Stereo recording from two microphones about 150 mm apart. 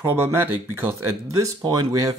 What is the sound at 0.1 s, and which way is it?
Speech, 15° right (ahead or behind).